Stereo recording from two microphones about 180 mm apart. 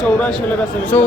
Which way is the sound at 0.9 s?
10° left (ahead or behind).